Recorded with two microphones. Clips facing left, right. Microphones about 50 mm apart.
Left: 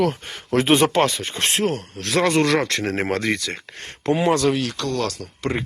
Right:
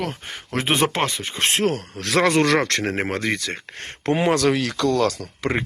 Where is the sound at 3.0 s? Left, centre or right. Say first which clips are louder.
Left 2 dB; centre.